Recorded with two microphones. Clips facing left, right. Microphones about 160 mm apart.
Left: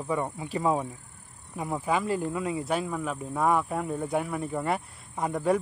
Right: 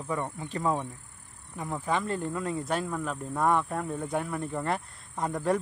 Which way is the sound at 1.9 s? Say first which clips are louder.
Left 2 dB; 5° left (ahead or behind).